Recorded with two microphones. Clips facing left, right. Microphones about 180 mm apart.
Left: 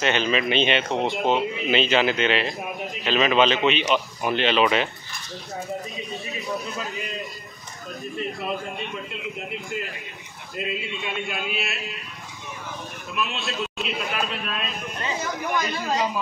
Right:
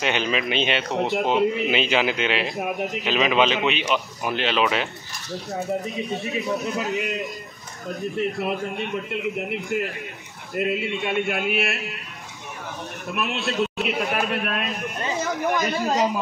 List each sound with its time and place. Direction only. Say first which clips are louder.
0.0 s a man's voice: left 1 dB; 10° right (ahead or behind)
6.2 s a man's voice: right 3 dB; 70° right (ahead or behind)
8.2 s a man's voice: right 4 dB; 70° right (ahead or behind)
13.1 s a man's voice: right 3 dB; 60° right (ahead or behind)
15.5 s a man's voice: right 1 dB; 40° right (ahead or behind)